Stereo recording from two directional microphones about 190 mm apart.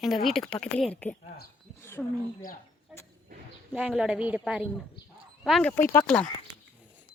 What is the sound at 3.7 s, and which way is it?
Speech, 5° right (ahead or behind).